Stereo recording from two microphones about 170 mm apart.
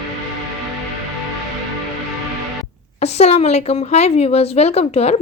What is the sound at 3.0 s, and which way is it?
A woman's voice, 40° left (ahead or behind).